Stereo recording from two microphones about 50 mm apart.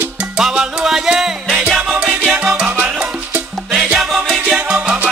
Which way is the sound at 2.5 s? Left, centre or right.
Right.